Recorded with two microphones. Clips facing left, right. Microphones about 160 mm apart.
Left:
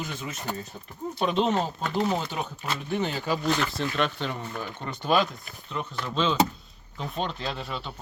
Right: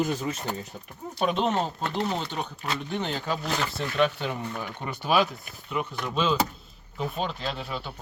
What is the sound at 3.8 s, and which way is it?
Speech, 5° right (ahead or behind).